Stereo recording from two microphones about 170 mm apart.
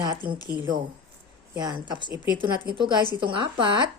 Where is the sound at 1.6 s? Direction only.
25° right (ahead or behind).